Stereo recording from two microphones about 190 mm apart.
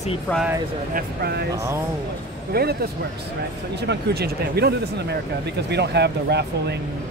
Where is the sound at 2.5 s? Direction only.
55° right (ahead or behind).